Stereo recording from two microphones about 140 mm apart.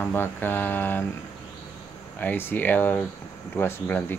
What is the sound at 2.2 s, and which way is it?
Speech, 15° left (ahead or behind).